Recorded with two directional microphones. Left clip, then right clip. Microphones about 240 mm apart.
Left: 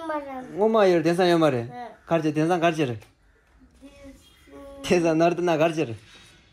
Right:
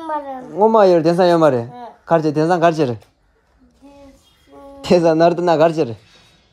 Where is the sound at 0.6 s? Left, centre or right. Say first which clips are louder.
Right 8 dB; right.